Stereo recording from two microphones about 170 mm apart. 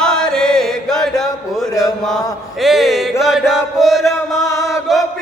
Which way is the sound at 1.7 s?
20° left (ahead or behind).